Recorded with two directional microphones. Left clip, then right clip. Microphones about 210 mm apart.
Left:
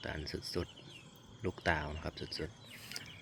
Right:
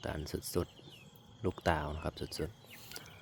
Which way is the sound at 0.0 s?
15° right (ahead or behind).